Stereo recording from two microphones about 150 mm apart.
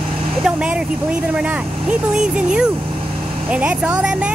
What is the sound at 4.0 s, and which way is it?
Speech, 5° right (ahead or behind).